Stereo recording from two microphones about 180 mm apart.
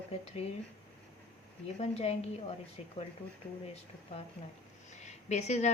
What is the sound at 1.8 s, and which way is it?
Speech, 35° left (ahead or behind).